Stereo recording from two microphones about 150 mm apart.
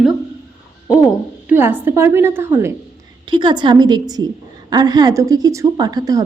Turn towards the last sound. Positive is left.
turn(degrees=-25)  # may be behind; listen again after turning